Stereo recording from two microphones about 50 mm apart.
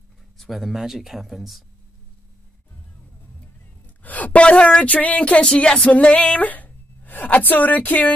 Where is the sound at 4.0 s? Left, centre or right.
Left.